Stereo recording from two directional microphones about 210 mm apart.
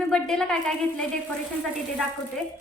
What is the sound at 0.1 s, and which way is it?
Speech, 5° left (ahead or behind).